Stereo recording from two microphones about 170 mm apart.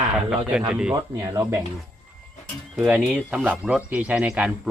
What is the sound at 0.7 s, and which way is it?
Speech, 5° right (ahead or behind).